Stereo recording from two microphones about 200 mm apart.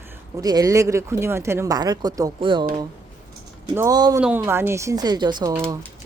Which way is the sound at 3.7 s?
15° right (ahead or behind).